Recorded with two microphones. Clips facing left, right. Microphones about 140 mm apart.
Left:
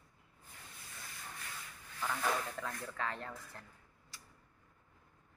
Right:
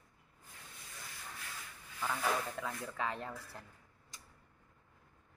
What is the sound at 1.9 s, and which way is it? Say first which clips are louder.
Snake: right 1 dB; 5° right (ahead or behind).